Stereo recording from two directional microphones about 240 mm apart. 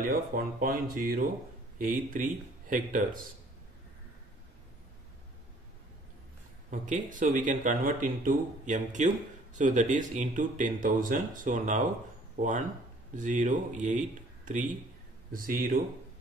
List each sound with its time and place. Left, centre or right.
0.0 s speech: right
6.7 s speech: right
13.1 s speech: right